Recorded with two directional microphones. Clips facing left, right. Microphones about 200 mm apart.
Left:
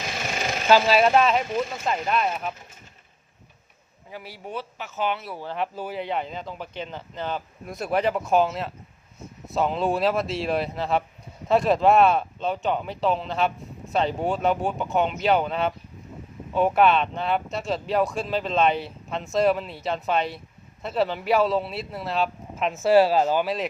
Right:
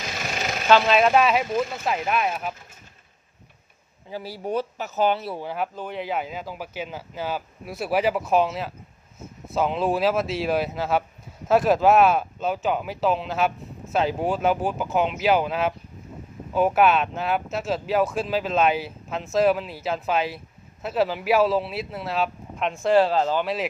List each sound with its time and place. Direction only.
0.7 s speech: 5° left (ahead or behind)
4.1 s speech: 35° right (ahead or behind)
5.7 s speech: 5° left (ahead or behind)